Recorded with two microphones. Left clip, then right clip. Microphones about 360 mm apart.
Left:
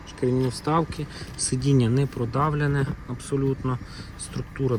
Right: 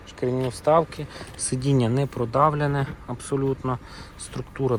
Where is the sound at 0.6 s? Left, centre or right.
Centre.